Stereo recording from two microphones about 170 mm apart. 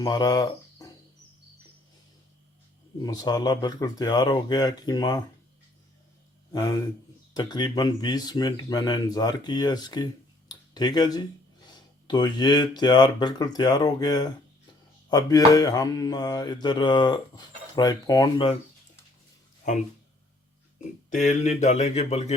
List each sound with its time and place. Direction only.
0.0 s speech: 20° left (ahead or behind)
3.0 s mantra: 20° left (ahead or behind)
6.5 s mantra: 25° left (ahead or behind)
10.5 s speech: 25° left (ahead or behind)
12.0 s mantra: 25° left (ahead or behind)
19.6 s speech: 45° left (ahead or behind)
21.1 s speech: 45° left (ahead or behind)